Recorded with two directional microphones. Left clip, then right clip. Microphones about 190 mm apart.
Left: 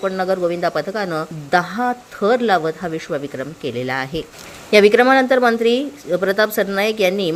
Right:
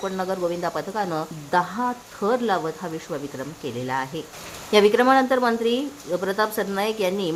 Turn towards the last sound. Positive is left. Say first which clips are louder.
# left 6 dB
turn(degrees=10)  # may be behind; listen again after turning